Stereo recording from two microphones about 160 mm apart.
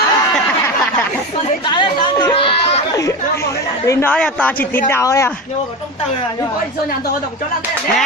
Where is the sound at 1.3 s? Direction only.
30° left (ahead or behind).